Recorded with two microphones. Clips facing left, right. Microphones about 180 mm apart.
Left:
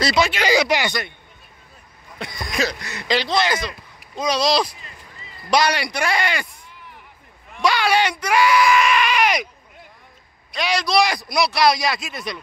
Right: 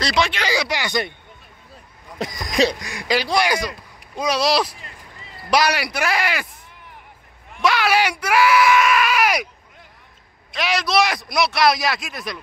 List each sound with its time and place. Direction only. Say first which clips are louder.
0.0 s a man's voice: left 2 dB; 5° left (ahead or behind)
0.5 s speech: left 5 dB; 20° left (ahead or behind)
2.1 s speech: right 4 dB; 40° right (ahead or behind)
2.5 s a man's voice: right 5 dB; 15° right (ahead or behind)
7.6 s speech: even; 5° right (ahead or behind)
10.5 s a man's voice: even; centre (ahead or behind)